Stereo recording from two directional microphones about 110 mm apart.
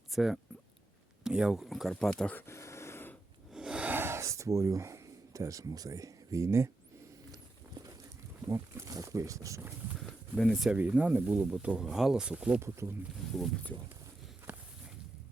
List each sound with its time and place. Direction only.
0.1 s speech: 5° right (ahead or behind)
2.5 s a sound: 25° left (ahead or behind)
3.5 s a sound: 10° right (ahead or behind); by 7.9 s 35° right (ahead or behind)
8.4 s speech: 30° right (ahead or behind)
10.3 s speech: centre (ahead or behind)
10.8 s speech: 15° right (ahead or behind)
12.5 s speech: 25° right (ahead or behind)
14.5 s walk: 15° right (ahead or behind)